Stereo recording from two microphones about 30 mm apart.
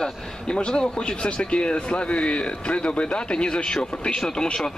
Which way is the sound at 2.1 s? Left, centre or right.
Left.